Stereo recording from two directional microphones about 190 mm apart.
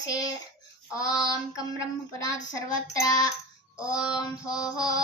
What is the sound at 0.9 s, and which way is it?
Child singing, 20° left (ahead or behind).